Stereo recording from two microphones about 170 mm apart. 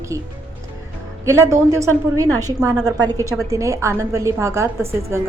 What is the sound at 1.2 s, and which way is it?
A woman's voice, 15° right (ahead or behind).